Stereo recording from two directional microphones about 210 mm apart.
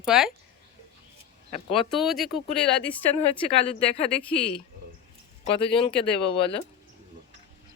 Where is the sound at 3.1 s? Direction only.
25° left (ahead or behind).